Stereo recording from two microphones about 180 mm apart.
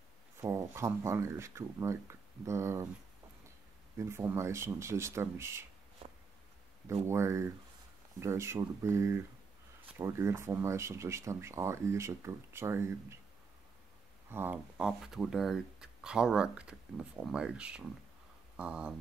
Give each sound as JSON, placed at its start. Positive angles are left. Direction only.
{"t": 0.4, "sound": "speech", "side_deg": -15}
{"t": 4.0, "sound": "speech", "side_deg": -15}
{"t": 7.1, "sound": "speech", "side_deg": -15}
{"t": 14.3, "sound": "speech", "side_deg": -10}